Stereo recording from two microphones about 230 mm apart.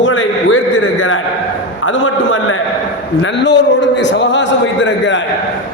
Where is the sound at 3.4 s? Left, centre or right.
Left.